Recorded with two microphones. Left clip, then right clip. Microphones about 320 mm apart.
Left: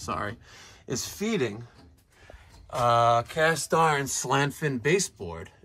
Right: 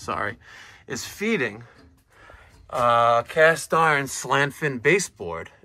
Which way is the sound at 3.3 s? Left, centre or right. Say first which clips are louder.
Right 6 dB; centre.